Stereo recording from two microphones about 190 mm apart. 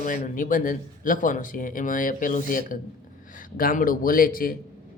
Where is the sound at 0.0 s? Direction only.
40° left (ahead or behind).